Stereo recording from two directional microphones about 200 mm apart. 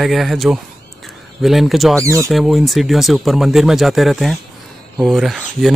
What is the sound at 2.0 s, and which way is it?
Speech, 15° right (ahead or behind).